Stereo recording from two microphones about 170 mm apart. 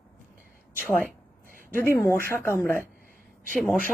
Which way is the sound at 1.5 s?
55° right (ahead or behind).